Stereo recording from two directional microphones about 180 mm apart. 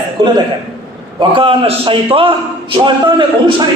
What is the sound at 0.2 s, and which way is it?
A man's voice, 25° right (ahead or behind).